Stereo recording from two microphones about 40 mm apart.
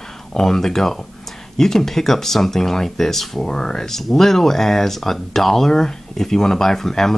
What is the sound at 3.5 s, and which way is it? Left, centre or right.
Speech, centre.